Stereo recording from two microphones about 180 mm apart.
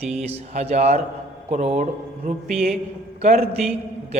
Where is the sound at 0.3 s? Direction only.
35° right (ahead or behind).